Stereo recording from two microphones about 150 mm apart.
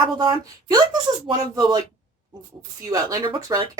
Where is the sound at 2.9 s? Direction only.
25° right (ahead or behind).